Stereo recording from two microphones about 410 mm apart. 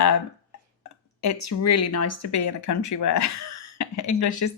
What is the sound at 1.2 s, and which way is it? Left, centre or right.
Speech, left.